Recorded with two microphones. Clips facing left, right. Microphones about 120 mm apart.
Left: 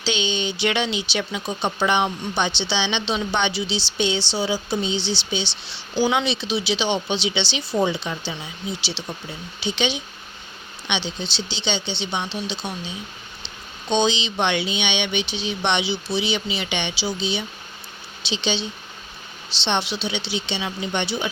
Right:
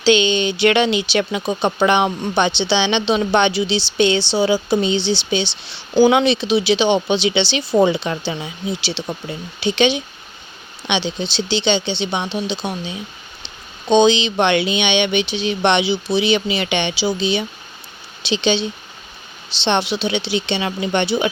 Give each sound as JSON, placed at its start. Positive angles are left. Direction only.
{"t": 0.0, "sound": "speech", "side_deg": -65}
{"t": 19.6, "sound": "speech", "side_deg": -60}